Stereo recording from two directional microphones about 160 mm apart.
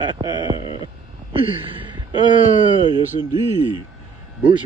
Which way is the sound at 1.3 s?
35° right (ahead or behind).